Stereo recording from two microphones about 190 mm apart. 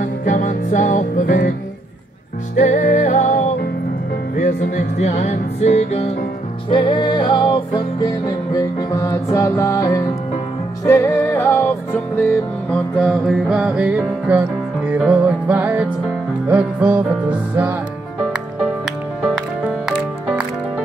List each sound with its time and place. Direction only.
0.0 s music: 45° left (ahead or behind)
2.5 s music: 40° left (ahead or behind); by 17.7 s 10° right (ahead or behind)